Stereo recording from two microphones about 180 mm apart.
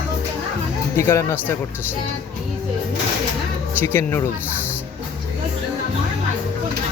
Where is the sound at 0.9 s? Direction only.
15° left (ahead or behind).